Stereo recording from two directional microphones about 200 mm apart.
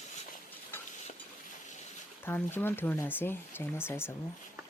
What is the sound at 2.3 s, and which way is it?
Speech, 10° left (ahead or behind).